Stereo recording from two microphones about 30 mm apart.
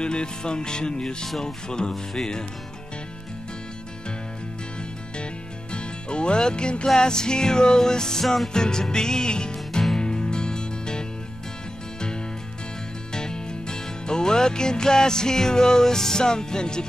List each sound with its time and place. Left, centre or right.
0.0 s music: left
5.7 s music: left
13.1 s music: left